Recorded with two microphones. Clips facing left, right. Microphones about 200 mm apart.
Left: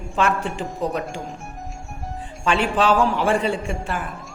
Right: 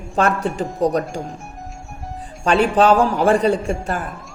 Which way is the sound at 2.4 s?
40° right (ahead or behind).